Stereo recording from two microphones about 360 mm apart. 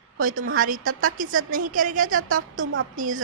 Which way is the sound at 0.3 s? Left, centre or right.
Right.